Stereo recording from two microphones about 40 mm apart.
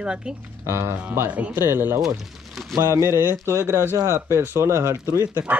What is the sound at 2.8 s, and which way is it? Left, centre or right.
Speech, right.